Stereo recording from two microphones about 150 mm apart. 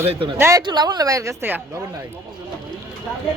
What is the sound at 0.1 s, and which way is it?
Speech, 35° right (ahead or behind).